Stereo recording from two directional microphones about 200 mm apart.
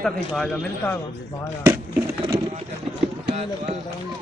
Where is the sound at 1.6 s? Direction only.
10° right (ahead or behind).